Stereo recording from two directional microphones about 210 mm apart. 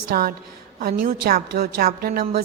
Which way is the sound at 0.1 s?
45° right (ahead or behind).